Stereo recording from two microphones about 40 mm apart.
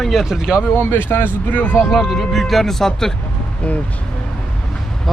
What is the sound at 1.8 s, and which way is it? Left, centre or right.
Speech, centre.